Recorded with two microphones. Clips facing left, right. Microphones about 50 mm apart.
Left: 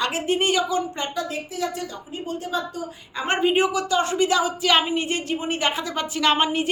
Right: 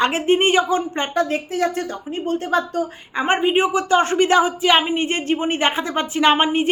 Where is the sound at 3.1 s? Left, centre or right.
Right.